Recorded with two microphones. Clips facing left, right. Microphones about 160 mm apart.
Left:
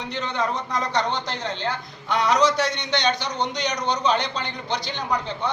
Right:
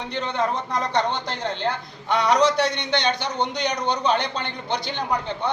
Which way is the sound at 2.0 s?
60° right (ahead or behind).